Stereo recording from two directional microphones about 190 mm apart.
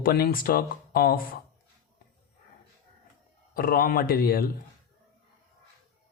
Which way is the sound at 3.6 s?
50° left (ahead or behind).